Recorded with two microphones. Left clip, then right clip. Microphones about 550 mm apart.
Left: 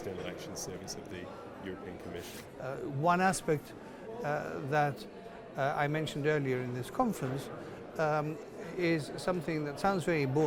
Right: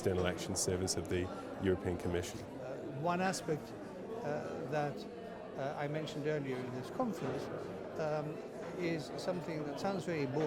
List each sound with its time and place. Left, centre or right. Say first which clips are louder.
0.0 s speech: right 5 dB; right
2.6 s a man's voice: left 8 dB; left